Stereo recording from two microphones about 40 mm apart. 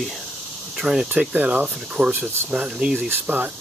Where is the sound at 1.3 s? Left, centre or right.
Right.